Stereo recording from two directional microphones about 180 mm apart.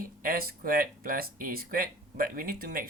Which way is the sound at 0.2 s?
55° right (ahead or behind).